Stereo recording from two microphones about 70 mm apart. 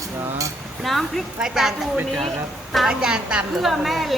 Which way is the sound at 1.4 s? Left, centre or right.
Centre.